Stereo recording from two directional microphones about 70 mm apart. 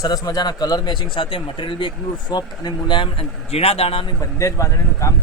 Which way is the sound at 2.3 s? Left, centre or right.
Left.